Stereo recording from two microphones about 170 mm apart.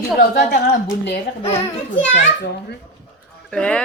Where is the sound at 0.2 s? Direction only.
65° left (ahead or behind).